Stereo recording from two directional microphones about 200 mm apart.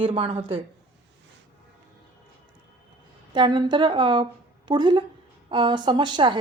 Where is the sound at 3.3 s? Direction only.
25° right (ahead or behind).